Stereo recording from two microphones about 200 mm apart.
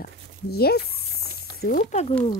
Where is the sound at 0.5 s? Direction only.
50° left (ahead or behind).